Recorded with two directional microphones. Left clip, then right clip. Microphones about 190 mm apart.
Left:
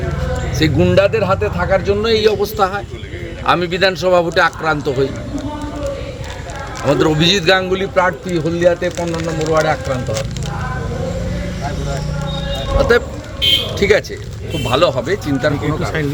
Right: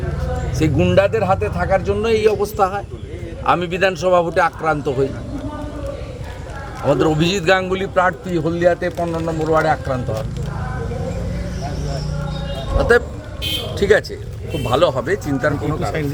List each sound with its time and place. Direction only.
0.6 s speech: centre (ahead or behind)
6.8 s speech: 5° left (ahead or behind)
9.0 s speech: 10° right (ahead or behind)
12.7 s speech: centre (ahead or behind)
13.4 s buzzer: 55° left (ahead or behind)
13.7 s speech: centre (ahead or behind)